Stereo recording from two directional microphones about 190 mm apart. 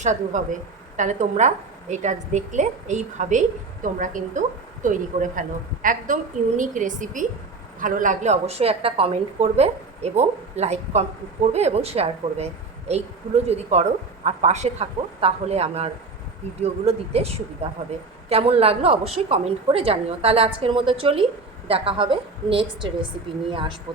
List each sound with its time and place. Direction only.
0.0 s a woman's voice: 40° right (ahead or behind)